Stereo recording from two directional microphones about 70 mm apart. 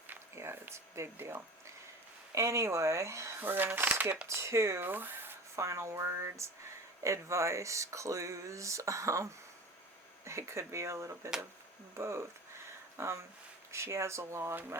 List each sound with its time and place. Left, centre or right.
0.3 s speech: right
3.4 s speech: right
4.3 s speech: right
4.9 s speech: right
5.5 s speech: right